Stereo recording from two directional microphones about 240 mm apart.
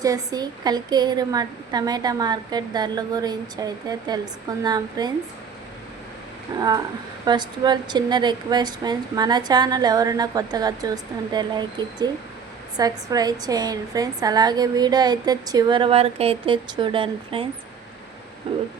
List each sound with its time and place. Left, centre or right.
0.0 s a woman's voice: centre
6.6 s a woman's voice: centre